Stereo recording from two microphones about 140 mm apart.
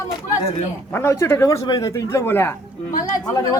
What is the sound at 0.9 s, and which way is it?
Speech, 20° left (ahead or behind).